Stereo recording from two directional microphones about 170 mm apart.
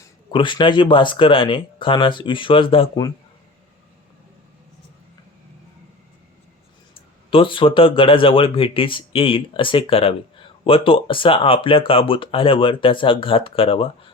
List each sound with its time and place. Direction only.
0.0 s speech: 25° left (ahead or behind)
7.3 s speech: 30° left (ahead or behind)